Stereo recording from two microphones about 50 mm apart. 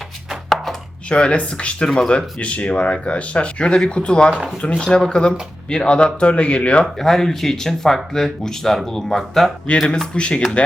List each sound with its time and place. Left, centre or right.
0.3 s chopping: centre
1.1 s speech: left
6.8 s speech: centre
10.2 s speech: left